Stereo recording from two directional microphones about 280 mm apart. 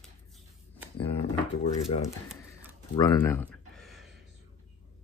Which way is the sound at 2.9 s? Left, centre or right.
Centre.